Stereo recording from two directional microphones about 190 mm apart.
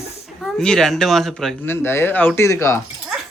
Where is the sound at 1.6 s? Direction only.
10° left (ahead or behind).